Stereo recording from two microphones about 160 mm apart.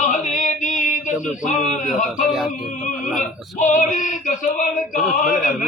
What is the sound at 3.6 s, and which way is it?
Male singing, 50° left (ahead or behind).